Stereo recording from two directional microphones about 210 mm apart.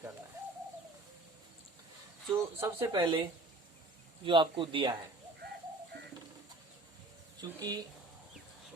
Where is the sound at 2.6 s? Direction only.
10° right (ahead or behind).